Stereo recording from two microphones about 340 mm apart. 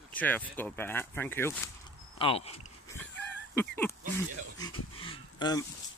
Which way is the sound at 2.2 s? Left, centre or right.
Centre.